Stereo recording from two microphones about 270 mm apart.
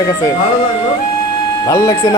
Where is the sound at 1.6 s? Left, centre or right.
Centre.